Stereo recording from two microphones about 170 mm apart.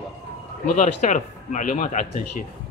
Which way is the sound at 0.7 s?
45° left (ahead or behind).